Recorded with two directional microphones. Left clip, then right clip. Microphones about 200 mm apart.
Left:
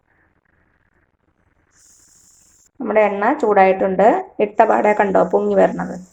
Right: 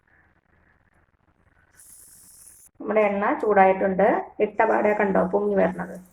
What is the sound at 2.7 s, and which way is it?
Speech, 40° left (ahead or behind).